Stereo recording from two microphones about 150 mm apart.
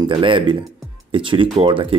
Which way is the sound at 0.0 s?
35° right (ahead or behind).